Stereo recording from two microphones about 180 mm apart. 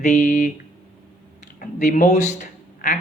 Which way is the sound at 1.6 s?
45° left (ahead or behind).